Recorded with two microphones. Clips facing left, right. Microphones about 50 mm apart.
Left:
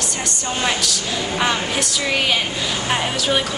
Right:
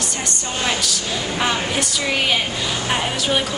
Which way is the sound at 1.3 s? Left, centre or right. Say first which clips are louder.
Left 1 dB; centre.